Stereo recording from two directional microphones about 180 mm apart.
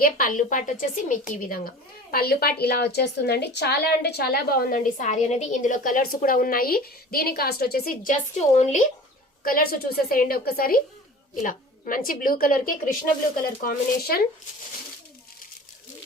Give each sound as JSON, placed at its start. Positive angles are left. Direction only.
{"t": 0.0, "sound": "a woman's voice", "side_deg": 50}
{"t": 9.4, "sound": "a woman's voice", "side_deg": 55}